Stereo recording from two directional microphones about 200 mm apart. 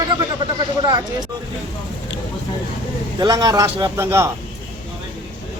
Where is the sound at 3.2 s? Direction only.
20° right (ahead or behind).